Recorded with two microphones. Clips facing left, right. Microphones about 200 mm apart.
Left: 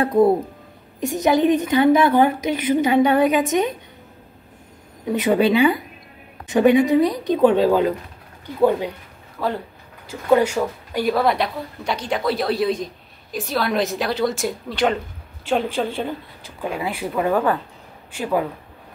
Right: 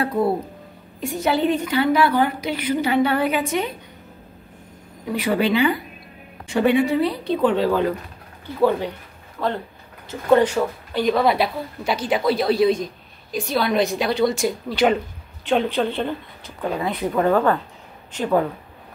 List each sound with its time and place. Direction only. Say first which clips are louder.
1.0 s a woman's voice: left 3 dB; 20° left (ahead or behind)
5.0 s a woman's voice: left 3 dB; 20° left (ahead or behind)